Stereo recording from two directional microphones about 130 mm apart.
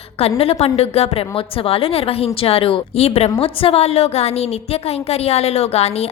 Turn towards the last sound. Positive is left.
turn(degrees=55)  # may be behind; listen again after turning